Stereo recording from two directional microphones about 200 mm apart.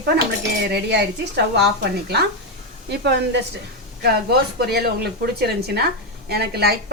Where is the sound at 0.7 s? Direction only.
55° right (ahead or behind).